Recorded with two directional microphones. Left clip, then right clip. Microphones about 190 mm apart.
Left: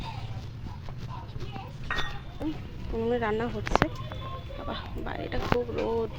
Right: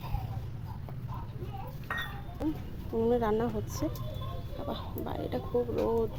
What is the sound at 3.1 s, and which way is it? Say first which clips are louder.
Speech: left 1 dB; 20° right (ahead or behind).